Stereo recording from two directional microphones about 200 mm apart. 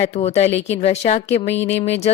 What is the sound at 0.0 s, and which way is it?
Speech, 35° left (ahead or behind).